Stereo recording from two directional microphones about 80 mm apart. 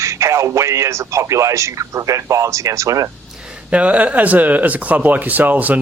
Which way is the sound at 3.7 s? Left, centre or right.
Centre.